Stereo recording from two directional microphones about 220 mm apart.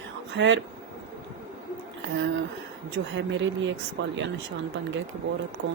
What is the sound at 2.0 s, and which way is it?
A woman's voice, 55° right (ahead or behind).